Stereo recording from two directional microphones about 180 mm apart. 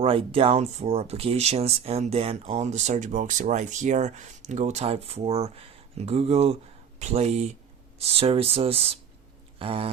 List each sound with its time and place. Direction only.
0.0 s speech: 30° right (ahead or behind)